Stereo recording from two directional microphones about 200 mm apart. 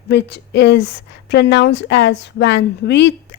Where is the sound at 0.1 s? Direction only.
60° left (ahead or behind).